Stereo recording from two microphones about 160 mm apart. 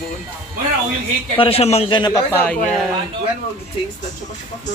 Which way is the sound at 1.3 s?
35° left (ahead or behind).